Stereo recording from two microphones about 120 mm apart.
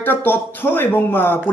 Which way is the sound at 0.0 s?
15° left (ahead or behind).